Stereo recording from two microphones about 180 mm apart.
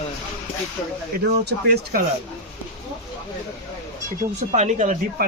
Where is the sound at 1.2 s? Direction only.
65° right (ahead or behind).